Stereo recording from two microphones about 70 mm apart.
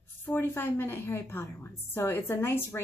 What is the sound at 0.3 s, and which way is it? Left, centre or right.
Speech, left.